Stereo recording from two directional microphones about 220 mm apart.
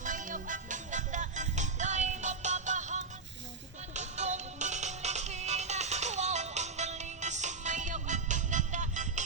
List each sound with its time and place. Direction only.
0.0 s music: 35° right (ahead or behind)